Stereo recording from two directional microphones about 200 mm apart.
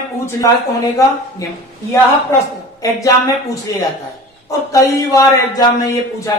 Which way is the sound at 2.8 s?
15° left (ahead or behind).